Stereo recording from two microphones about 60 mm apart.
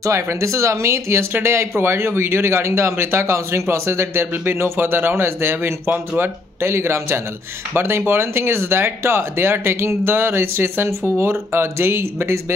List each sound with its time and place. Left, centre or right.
0.0 s speech: right